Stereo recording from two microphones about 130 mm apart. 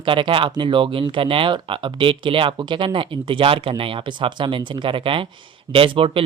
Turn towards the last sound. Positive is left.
turn(degrees=-45)  # may be behind; listen again after turning